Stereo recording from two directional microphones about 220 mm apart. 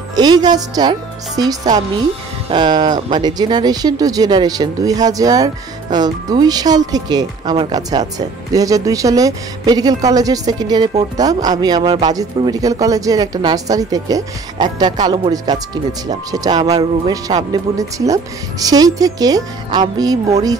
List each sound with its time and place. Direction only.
0.1 s speech: 20° right (ahead or behind)